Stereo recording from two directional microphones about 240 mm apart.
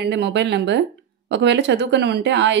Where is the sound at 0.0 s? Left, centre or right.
Right.